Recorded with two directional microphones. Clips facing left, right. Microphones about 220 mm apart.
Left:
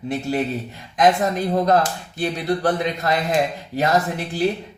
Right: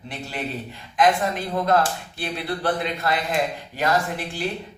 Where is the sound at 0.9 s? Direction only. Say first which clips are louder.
Left 3 dB; 40° left (ahead or behind).